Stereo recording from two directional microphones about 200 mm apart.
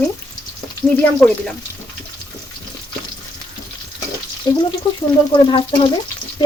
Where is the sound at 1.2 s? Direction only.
5° left (ahead or behind).